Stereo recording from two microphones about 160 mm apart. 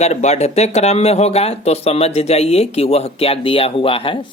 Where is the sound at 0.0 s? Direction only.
45° left (ahead or behind).